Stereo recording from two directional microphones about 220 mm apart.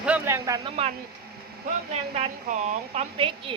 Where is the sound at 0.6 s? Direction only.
25° right (ahead or behind).